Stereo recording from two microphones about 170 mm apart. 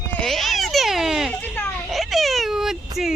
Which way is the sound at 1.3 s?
10° left (ahead or behind).